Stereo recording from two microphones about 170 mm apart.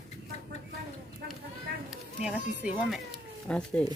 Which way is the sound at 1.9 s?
5° right (ahead or behind).